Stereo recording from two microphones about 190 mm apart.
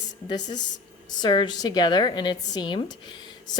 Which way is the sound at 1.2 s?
25° left (ahead or behind).